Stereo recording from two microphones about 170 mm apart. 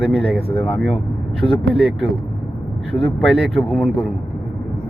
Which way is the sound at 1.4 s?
20° left (ahead or behind).